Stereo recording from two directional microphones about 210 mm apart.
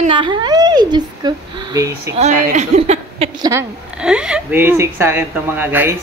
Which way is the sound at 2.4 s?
35° right (ahead or behind).